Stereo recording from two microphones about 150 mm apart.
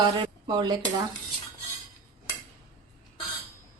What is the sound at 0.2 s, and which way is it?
Speech, 30° right (ahead or behind).